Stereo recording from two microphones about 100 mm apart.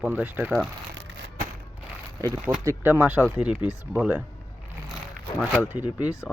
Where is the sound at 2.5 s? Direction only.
30° right (ahead or behind).